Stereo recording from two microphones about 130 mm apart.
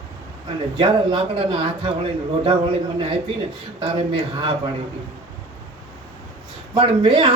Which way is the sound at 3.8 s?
45° right (ahead or behind).